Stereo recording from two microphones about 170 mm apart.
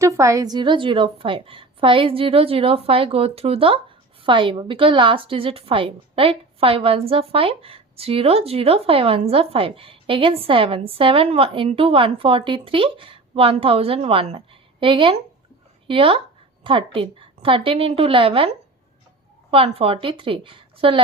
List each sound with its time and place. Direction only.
0.0 s a woman's voice: 20° right (ahead or behind)